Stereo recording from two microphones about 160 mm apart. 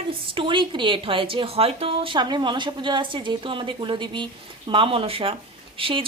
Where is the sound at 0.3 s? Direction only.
30° right (ahead or behind).